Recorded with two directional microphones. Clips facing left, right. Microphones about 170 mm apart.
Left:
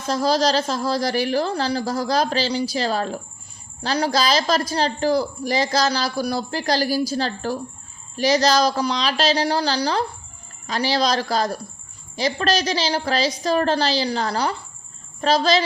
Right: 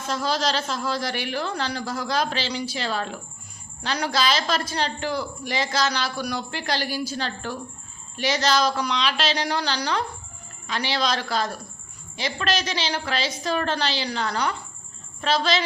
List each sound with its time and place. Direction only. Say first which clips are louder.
0.1 s a man's voice: left 6 dB; 35° left (ahead or behind)